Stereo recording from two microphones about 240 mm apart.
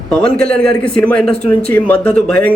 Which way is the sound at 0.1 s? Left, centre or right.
Centre.